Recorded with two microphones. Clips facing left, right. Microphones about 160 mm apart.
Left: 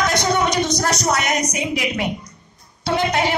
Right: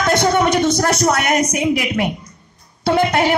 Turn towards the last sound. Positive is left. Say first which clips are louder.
# right 4 dB
turn(degrees=-55)  # may be behind; listen again after turning